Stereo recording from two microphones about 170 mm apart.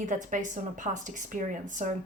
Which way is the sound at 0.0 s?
50° right (ahead or behind).